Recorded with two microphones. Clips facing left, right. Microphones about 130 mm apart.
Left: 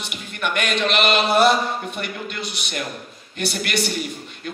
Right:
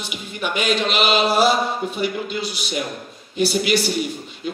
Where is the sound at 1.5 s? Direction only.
5° right (ahead or behind).